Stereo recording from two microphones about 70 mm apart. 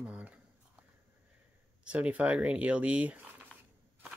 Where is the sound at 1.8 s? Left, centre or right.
Centre.